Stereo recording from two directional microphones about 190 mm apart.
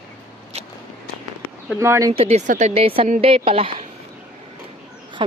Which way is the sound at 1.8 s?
15° right (ahead or behind).